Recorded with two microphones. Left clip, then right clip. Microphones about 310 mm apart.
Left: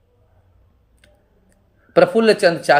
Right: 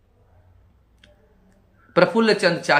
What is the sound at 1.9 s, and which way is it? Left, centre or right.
Speech, centre.